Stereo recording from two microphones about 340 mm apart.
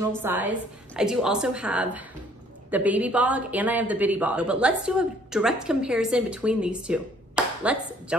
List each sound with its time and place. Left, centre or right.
0.1 s speech: centre